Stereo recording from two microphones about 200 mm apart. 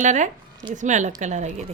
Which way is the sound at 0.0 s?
40° right (ahead or behind).